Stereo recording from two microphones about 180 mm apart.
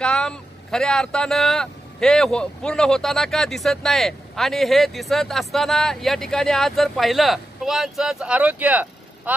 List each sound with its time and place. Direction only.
0.0 s speech: 5° left (ahead or behind)